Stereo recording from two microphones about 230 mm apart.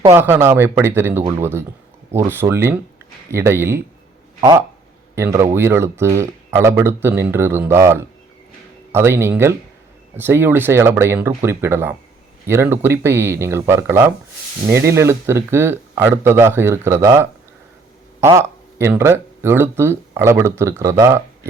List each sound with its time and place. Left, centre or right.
0.0 s speech: centre